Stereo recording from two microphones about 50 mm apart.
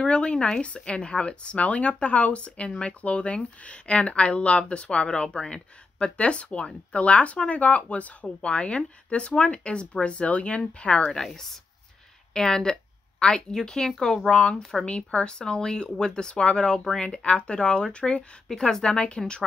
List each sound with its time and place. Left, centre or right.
0.0 s speech: left
11.1 s speech: centre